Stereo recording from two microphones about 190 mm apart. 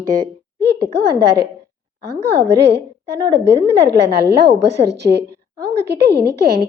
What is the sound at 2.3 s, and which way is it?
A woman's voice, 65° right (ahead or behind).